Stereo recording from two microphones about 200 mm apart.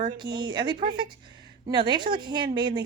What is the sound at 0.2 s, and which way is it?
A woman's voice, 20° right (ahead or behind).